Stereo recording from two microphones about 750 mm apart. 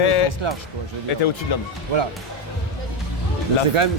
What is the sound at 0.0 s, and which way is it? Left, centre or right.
Music, left.